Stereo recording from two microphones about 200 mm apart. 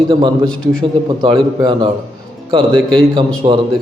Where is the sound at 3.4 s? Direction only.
25° right (ahead or behind).